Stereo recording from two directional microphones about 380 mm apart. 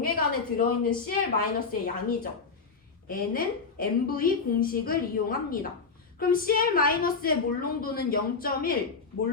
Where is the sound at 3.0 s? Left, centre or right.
Left.